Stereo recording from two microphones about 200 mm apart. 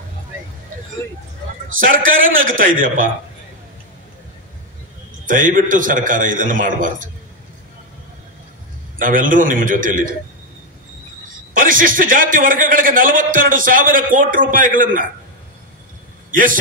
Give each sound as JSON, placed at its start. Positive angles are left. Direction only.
{"t": 1.8, "sound": "a man's voice", "side_deg": -45}
{"t": 5.2, "sound": "a man's voice", "side_deg": -40}
{"t": 8.9, "sound": "a man's voice", "side_deg": -45}
{"t": 11.5, "sound": "a man's voice", "side_deg": -45}
{"t": 16.3, "sound": "a sound", "side_deg": -45}